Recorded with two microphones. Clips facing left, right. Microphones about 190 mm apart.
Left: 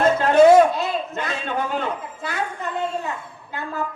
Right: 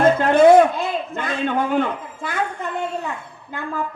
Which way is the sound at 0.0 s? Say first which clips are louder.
Right 1 dB; 55° right (ahead or behind).